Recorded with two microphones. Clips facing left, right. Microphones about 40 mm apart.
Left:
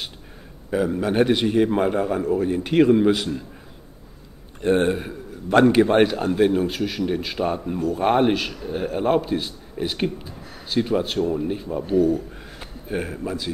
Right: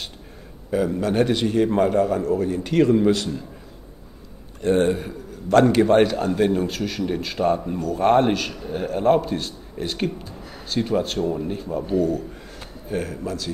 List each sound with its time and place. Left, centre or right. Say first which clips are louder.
0.7 s a man's voice: even; centre
4.6 s a man's voice: even; centre